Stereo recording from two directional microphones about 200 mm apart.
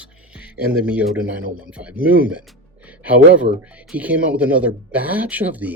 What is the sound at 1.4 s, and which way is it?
Speech, 45° right (ahead or behind).